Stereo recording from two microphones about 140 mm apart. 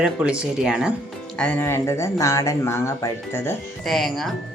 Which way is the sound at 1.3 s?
10° left (ahead or behind).